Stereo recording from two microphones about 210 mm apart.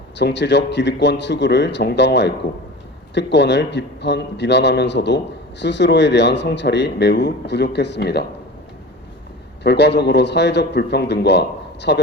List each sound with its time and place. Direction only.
0.2 s a man's voice: 55° left (ahead or behind)
9.6 s a man's voice: 55° left (ahead or behind)